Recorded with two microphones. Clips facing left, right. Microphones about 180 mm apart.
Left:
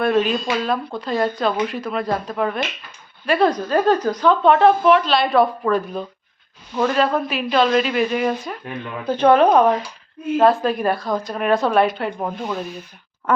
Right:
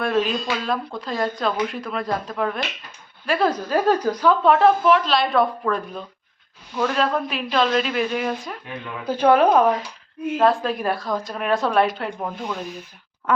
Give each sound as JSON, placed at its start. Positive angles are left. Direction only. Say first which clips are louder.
{"t": 0.0, "sound": "speech", "louder": "left 3 dB", "side_deg": 0}
{"t": 9.0, "sound": "speech", "louder": "left 2 dB", "side_deg": -10}